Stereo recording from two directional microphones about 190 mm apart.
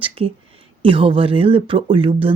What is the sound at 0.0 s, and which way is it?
Speech, 30° right (ahead or behind).